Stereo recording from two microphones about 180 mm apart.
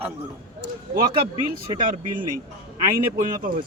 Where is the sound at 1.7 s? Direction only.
50° right (ahead or behind).